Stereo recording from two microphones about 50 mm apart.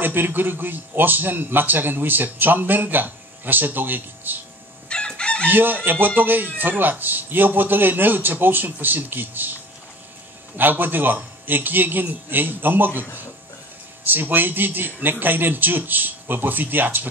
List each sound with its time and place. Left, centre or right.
0.0 s a man's voice: right
4.8 s chicken: centre
5.5 s a man's voice: right
10.6 s a man's voice: right
14.0 s a man's voice: right